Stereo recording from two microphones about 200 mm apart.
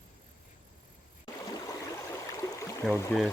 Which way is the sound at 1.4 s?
20° left (ahead or behind).